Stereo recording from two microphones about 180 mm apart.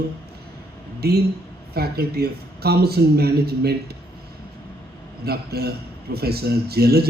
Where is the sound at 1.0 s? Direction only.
60° right (ahead or behind).